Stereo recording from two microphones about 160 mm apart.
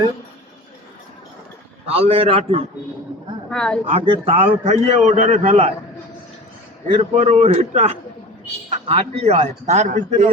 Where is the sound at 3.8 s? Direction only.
35° right (ahead or behind).